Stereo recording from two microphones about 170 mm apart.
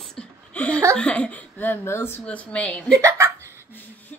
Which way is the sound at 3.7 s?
10° left (ahead or behind).